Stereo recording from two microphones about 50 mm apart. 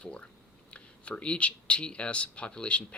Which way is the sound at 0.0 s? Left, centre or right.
Centre.